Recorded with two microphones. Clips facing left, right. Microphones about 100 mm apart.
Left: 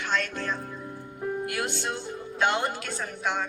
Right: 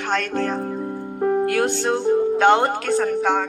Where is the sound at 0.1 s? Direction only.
70° right (ahead or behind).